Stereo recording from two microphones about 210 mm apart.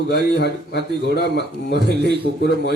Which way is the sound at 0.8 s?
50° right (ahead or behind).